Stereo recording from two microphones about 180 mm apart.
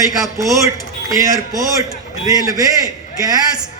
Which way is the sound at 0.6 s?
15° right (ahead or behind).